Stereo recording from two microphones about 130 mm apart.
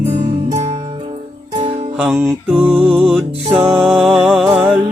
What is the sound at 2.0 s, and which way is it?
Music, 10° right (ahead or behind).